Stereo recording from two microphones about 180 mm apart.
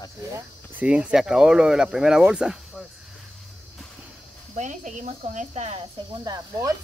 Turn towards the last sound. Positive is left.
turn(degrees=-20)  # may be behind; listen again after turning